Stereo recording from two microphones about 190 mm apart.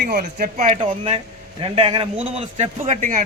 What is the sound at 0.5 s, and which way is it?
A man's voice, 35° right (ahead or behind).